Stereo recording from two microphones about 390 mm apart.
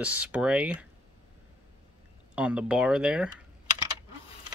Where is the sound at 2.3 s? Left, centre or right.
Centre.